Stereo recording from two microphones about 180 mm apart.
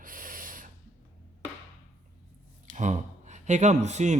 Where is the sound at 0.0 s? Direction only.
50° right (ahead or behind).